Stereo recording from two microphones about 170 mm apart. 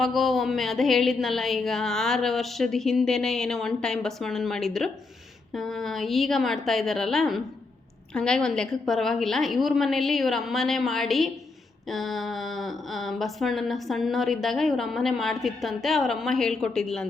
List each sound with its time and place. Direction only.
0.0 s speech: centre (ahead or behind)